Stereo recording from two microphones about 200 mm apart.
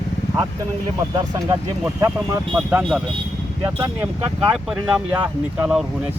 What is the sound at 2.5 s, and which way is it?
Speech, 5° right (ahead or behind).